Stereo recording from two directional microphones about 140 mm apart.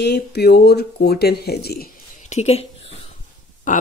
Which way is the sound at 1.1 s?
90° left.